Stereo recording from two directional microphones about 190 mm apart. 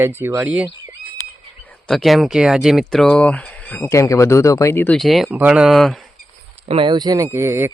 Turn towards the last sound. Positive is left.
turn(degrees=-15)  # may be behind; listen again after turning